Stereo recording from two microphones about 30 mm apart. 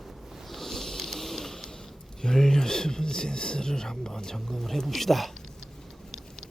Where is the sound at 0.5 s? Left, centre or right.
Centre.